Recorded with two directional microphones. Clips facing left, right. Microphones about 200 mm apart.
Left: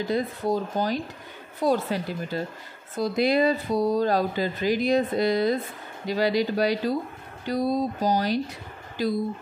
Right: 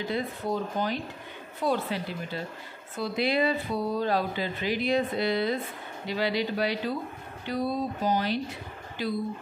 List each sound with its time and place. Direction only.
0.1 s speech: 40° left (ahead or behind)